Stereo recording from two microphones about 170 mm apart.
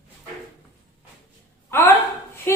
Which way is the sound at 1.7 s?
15° left (ahead or behind).